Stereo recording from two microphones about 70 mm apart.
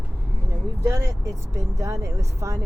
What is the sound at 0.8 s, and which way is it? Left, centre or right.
Speech, right.